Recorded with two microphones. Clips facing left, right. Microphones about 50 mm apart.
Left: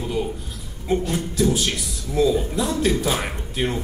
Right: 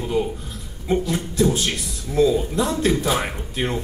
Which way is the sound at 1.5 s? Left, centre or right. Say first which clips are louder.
Even; centre.